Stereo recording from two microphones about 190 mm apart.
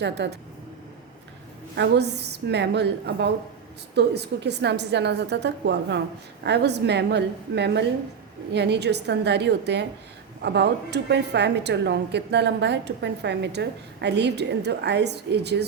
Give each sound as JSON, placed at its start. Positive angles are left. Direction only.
{"t": 0.0, "sound": "a woman's voice", "side_deg": -65}
{"t": 1.7, "sound": "a woman's voice", "side_deg": -60}